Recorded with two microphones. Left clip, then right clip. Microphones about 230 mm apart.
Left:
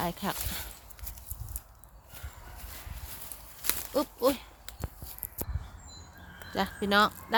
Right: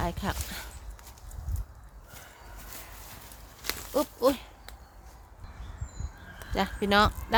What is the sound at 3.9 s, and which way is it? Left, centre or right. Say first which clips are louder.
Speech: right 2 dB; centre.